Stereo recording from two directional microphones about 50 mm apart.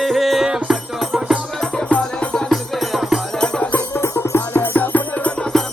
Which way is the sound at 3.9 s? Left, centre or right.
Left.